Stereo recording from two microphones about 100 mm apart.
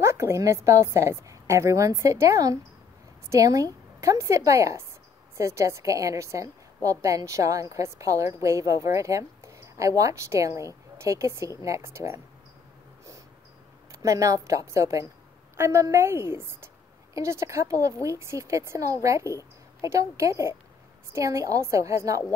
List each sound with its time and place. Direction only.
0.0 s a woman's voice: 25° right (ahead or behind)
14.0 s a woman's voice: 35° right (ahead or behind)